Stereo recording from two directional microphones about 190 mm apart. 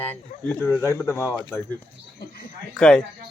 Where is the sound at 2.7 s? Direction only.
5° left (ahead or behind).